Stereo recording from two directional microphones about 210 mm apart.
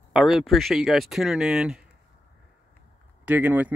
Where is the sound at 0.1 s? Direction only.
Centre (ahead or behind).